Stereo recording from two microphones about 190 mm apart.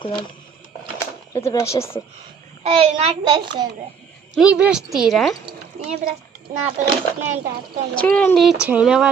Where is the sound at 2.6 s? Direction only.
30° right (ahead or behind).